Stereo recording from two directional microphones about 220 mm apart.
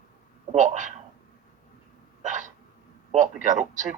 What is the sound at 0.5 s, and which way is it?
Speech, 35° right (ahead or behind).